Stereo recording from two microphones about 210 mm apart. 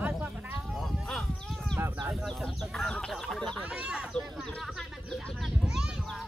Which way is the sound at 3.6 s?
5° right (ahead or behind).